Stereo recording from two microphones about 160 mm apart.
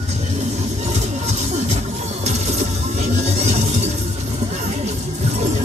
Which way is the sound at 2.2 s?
45° right (ahead or behind).